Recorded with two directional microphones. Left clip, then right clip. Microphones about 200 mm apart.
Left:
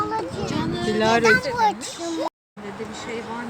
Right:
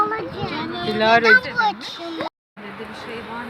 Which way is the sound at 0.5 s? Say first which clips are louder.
Left 2 dB; 30° left (ahead or behind).